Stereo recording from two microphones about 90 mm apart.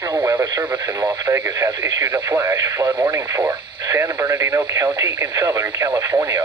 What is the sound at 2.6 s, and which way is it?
Speech, 45° right (ahead or behind).